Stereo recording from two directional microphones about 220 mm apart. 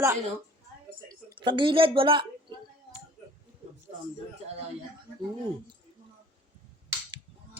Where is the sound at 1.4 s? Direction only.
20° right (ahead or behind).